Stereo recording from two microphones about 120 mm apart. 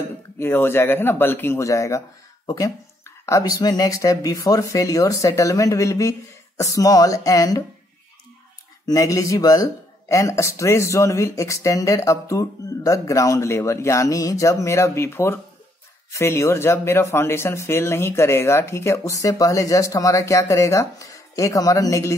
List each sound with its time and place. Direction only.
0.4 s speech: 20° left (ahead or behind)
8.8 s speech: 30° left (ahead or behind)